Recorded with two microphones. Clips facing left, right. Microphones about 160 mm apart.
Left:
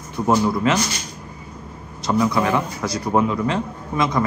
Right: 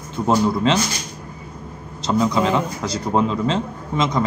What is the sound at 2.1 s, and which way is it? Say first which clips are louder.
A man's voice: right 1 dB; 20° right (ahead or behind).